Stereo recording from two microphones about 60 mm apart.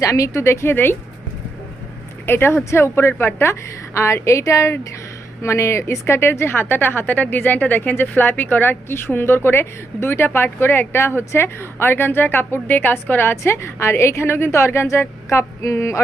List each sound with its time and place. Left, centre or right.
0.0 s a woman's voice: left
0.4 s a woman's voice: left
2.2 s speech: left
3.5 s a woman's voice: left
13.3 s a woman's voice: left